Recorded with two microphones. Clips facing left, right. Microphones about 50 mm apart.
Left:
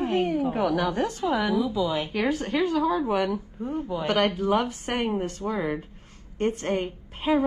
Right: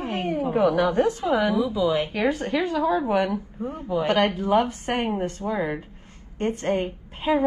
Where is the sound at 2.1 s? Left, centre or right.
Right.